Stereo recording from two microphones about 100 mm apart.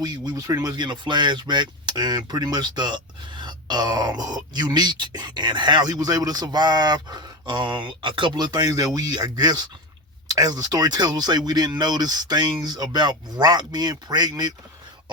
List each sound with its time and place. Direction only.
0.0 s speech: 45° right (ahead or behind)